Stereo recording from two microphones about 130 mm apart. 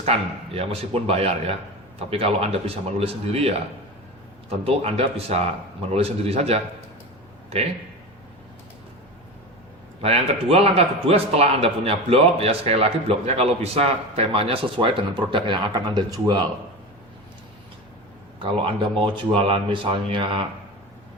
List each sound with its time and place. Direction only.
0.5 s a man's voice: 50° right (ahead or behind)
10.0 s a man's voice: 50° right (ahead or behind); by 16.5 s 35° right (ahead or behind)
18.3 s speech: 45° right (ahead or behind)